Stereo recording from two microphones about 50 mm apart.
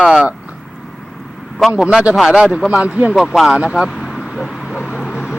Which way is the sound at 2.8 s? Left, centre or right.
Right.